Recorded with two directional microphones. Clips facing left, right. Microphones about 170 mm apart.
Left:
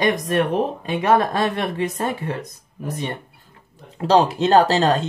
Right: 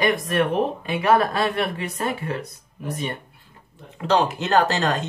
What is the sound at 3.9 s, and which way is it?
Speech, 35° left (ahead or behind).